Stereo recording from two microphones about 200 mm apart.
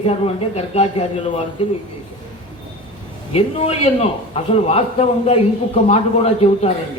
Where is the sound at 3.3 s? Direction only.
30° left (ahead or behind).